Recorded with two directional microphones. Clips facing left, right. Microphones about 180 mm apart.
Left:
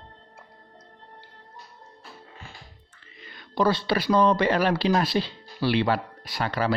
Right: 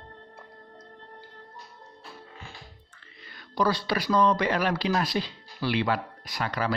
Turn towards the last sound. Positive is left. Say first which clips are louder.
# left 3 dB
turn(degrees=30)  # may be behind; listen again after turning